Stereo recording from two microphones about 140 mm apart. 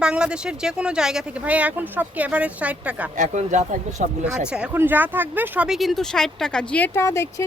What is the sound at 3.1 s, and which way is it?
Speech, 60° right (ahead or behind).